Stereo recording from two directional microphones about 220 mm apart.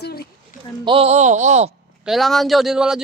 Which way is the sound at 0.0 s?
45° left (ahead or behind).